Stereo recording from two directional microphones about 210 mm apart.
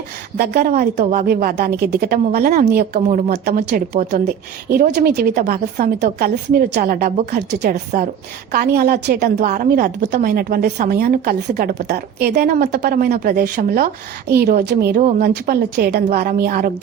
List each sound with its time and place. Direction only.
0.3 s a woman's voice: 50° right (ahead or behind)